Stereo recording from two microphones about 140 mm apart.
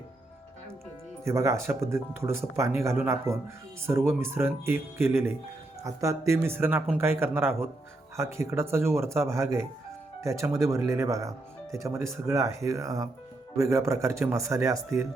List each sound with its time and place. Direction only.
1.2 s speech: 20° right (ahead or behind)